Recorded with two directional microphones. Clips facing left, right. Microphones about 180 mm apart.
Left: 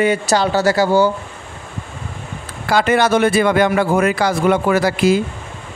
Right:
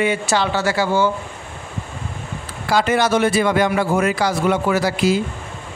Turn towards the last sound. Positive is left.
turn(degrees=55)  # may be behind; listen again after turning